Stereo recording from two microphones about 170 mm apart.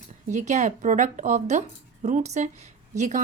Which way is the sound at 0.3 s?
45° right (ahead or behind).